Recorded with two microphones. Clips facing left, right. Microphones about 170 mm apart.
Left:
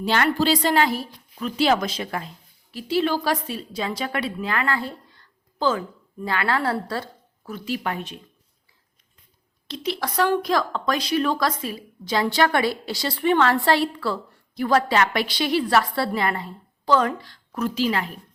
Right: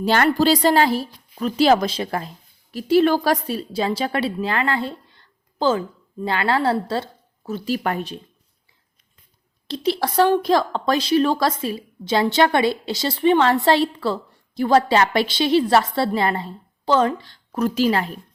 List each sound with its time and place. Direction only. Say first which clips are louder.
0.0 s a woman's voice: right 4 dB; 40° right (ahead or behind)
9.6 s a woman's voice: right 6 dB; 30° right (ahead or behind)
17.6 s a woman's voice: right 4 dB; 40° right (ahead or behind)